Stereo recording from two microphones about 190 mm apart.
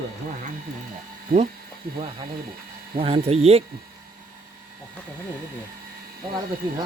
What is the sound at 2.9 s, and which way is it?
Speech, 30° right (ahead or behind).